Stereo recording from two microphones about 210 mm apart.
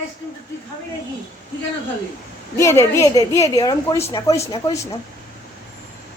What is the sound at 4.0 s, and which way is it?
Speech, 30° left (ahead or behind).